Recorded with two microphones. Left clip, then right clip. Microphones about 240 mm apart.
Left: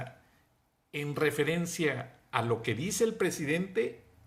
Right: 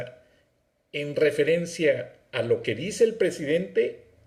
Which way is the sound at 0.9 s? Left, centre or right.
Centre.